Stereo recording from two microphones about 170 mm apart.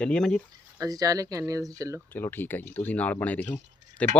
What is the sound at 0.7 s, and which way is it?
Speech, 20° right (ahead or behind).